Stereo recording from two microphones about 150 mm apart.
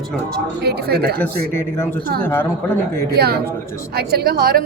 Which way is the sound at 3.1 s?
90° right.